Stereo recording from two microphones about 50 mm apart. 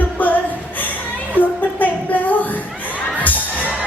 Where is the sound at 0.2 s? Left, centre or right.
Left.